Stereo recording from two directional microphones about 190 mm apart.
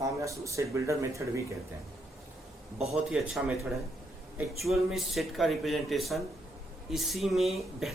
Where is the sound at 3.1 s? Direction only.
Centre (ahead or behind).